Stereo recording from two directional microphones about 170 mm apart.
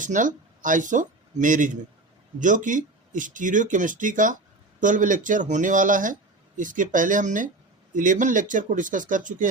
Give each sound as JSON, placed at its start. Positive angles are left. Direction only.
{"t": 0.0, "sound": "speech", "side_deg": -50}